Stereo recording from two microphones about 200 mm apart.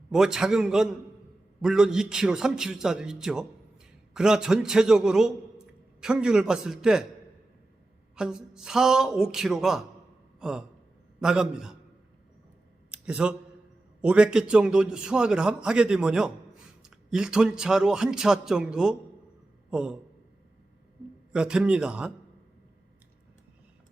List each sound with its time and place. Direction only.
0.1 s a man's voice: 5° right (ahead or behind)
8.1 s a man's voice: 5° right (ahead or behind)
12.9 s a sound: 5° right (ahead or behind)
14.0 s a man's voice: 5° right (ahead or behind)
21.3 s a man's voice: 5° right (ahead or behind)